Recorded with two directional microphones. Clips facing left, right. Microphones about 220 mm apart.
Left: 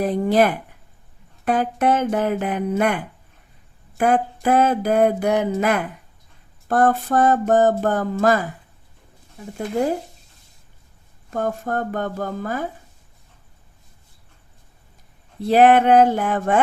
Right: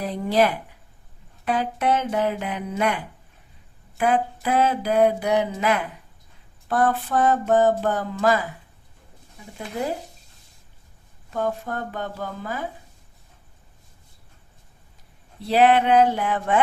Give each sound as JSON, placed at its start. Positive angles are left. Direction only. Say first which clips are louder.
{"t": 0.0, "sound": "mantra", "louder": "left 4 dB", "side_deg": 50}
{"t": 3.9, "sound": "speech", "louder": "left 3 dB", "side_deg": 45}
{"t": 4.4, "sound": "mantra", "louder": "left 5 dB", "side_deg": 45}
{"t": 11.3, "sound": "mantra", "louder": "left 3 dB", "side_deg": 50}
{"t": 15.4, "sound": "mantra", "louder": "left 4 dB", "side_deg": 50}